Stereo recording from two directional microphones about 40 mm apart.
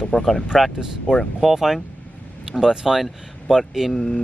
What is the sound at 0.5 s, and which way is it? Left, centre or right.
Speech, centre.